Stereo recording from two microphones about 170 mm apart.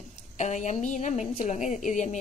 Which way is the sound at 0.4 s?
45° left (ahead or behind).